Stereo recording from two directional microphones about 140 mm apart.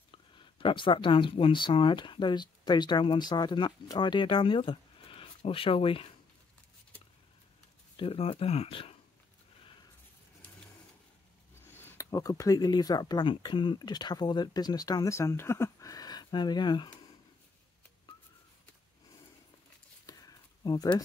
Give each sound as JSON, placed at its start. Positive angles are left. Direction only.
{"t": 0.1, "sound": "speech", "side_deg": 35}
{"t": 7.9, "sound": "speech", "side_deg": 40}
{"t": 11.8, "sound": "speech", "side_deg": 25}
{"t": 20.1, "sound": "a sound", "side_deg": 25}